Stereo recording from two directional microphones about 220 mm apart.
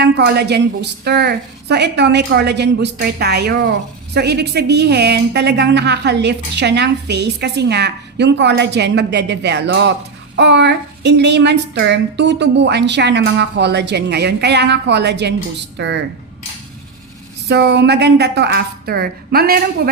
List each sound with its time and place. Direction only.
0.0 s a woman's voice: 50° right (ahead or behind)
17.5 s a woman's voice: 50° right (ahead or behind)